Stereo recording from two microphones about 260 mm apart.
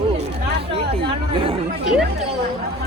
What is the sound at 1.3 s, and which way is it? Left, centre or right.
Speech, right.